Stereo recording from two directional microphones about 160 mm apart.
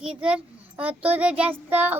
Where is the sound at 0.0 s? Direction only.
5° right (ahead or behind).